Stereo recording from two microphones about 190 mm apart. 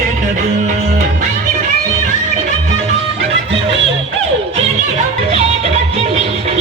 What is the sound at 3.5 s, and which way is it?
Music, 30° right (ahead or behind).